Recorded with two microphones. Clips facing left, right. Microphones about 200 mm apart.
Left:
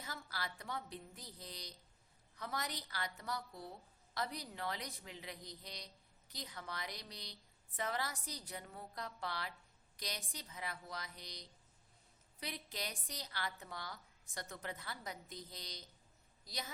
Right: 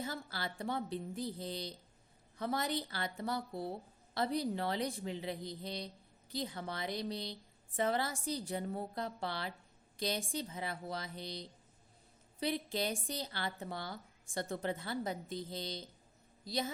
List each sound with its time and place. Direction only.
0.0 s speech: 30° right (ahead or behind)